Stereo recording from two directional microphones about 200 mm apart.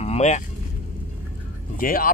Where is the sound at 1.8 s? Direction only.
45° left (ahead or behind).